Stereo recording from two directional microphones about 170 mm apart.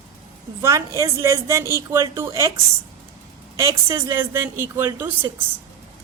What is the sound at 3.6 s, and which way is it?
A woman's voice, 20° right (ahead or behind).